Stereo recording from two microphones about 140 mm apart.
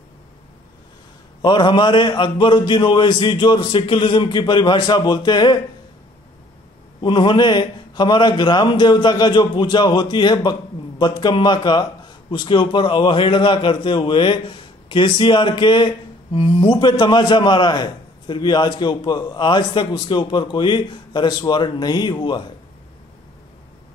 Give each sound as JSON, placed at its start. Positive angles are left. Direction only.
{"t": 1.4, "sound": "a man's voice", "side_deg": 35}
{"t": 7.0, "sound": "a man's voice", "side_deg": 35}